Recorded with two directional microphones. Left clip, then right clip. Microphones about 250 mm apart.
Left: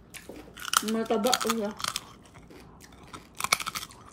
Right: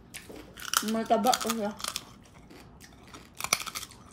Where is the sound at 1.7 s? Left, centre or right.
Left.